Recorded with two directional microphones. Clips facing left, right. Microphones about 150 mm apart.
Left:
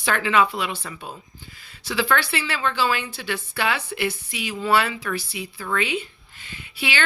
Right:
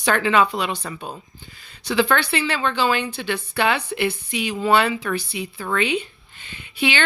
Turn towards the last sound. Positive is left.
turn(degrees=-25)  # may be behind; listen again after turning